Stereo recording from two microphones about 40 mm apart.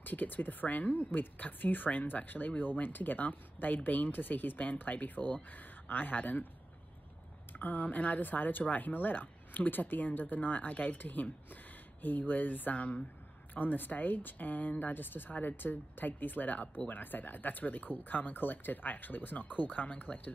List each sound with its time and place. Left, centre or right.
0.0 s a woman's voice: left
7.5 s a woman's voice: left